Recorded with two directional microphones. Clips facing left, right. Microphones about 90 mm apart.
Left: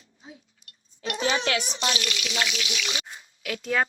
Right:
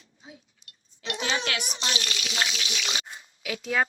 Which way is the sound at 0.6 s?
25° right (ahead or behind).